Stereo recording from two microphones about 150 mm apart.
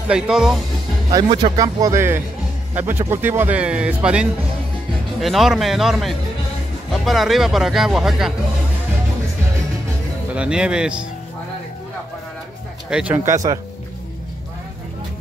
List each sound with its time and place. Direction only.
0.1 s speech: 5° right (ahead or behind)
1.1 s speech: 30° right (ahead or behind); by 8.3 s centre (ahead or behind)
10.3 s speech: 5° right (ahead or behind)
12.9 s speech: 10° right (ahead or behind)